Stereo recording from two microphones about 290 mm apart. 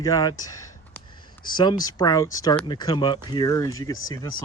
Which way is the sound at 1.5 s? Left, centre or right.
Centre.